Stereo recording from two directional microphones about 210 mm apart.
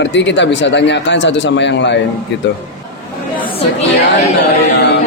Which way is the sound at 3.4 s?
25° left (ahead or behind).